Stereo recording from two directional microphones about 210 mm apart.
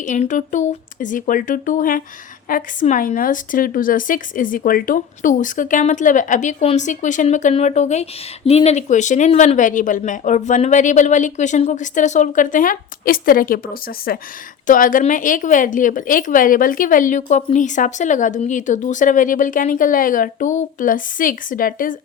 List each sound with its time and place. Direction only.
0.0 s a woman's voice: 35° left (ahead or behind)